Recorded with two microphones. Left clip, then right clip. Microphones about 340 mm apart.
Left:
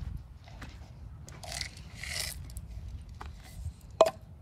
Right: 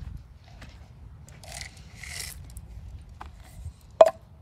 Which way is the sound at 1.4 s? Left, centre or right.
Centre.